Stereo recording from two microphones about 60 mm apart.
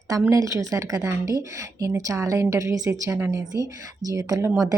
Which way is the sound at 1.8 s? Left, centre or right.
Right.